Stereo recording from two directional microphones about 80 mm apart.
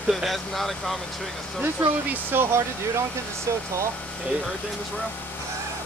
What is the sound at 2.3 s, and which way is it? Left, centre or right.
Speech, right.